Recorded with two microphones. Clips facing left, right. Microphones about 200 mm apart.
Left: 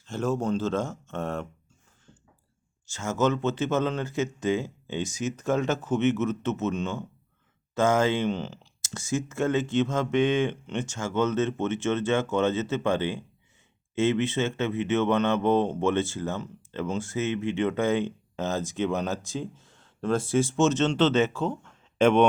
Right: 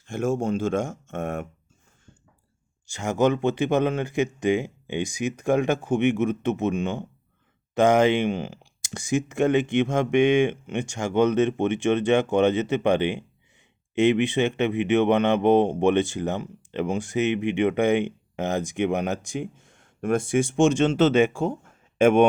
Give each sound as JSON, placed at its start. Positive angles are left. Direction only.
{"t": 0.1, "sound": "speech", "side_deg": -10}
{"t": 2.8, "sound": "speech", "side_deg": -15}